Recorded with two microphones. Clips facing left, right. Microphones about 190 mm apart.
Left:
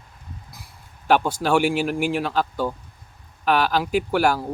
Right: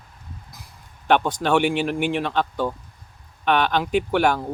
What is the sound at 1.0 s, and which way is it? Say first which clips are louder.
Speech: even; 5° left (ahead or behind).